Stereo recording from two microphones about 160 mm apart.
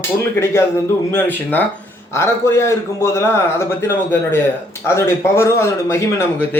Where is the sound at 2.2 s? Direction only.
15° left (ahead or behind).